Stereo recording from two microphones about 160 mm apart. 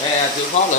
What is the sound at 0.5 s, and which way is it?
Speech, 45° left (ahead or behind).